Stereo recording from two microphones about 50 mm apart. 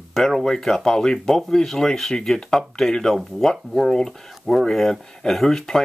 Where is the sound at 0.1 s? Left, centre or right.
Centre.